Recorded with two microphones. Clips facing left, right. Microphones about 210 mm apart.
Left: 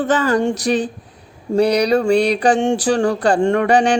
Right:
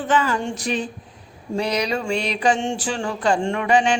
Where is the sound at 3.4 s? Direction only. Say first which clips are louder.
Left 8 dB; 55° left (ahead or behind).